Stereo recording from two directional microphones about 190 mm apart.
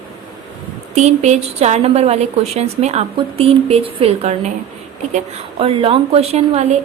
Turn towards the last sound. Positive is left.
turn(degrees=-35)  # may be behind; listen again after turning